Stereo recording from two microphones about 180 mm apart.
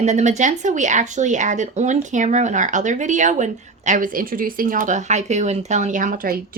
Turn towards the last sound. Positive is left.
turn(degrees=-55)  # may be behind; listen again after turning